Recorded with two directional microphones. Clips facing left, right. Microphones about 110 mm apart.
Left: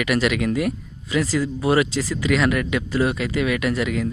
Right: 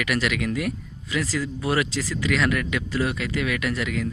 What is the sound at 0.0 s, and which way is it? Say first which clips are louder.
Speech: left 4 dB; 25° left (ahead or behind).